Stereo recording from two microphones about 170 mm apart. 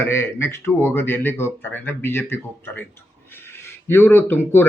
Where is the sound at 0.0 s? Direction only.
15° left (ahead or behind).